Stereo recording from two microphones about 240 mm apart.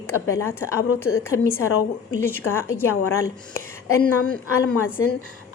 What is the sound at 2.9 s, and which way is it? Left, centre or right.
Speech, left.